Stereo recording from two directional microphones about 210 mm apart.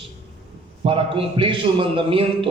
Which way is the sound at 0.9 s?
25° right (ahead or behind).